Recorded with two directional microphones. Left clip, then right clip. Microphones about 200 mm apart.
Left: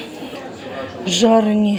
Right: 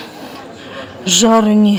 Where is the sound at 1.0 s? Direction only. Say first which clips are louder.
Right 3 dB; 20° right (ahead or behind).